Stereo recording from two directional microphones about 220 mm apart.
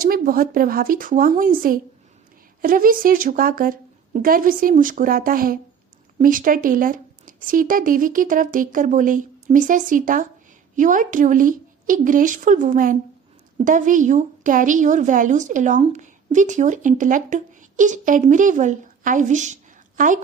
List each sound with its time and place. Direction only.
0.0 s a woman's voice: 40° right (ahead or behind)